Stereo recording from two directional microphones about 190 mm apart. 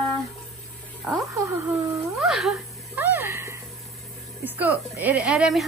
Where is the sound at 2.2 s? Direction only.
Centre (ahead or behind).